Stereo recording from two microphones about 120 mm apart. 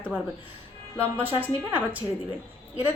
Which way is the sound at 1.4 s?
15° right (ahead or behind).